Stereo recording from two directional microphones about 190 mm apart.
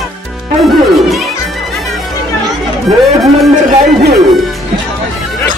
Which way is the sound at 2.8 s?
Centre (ahead or behind).